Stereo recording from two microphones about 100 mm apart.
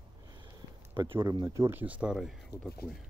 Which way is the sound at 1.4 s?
30° right (ahead or behind).